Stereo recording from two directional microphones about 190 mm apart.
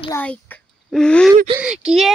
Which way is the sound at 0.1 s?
10° left (ahead or behind).